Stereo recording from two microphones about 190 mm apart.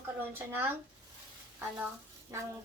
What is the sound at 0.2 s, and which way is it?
Speech, 10° right (ahead or behind).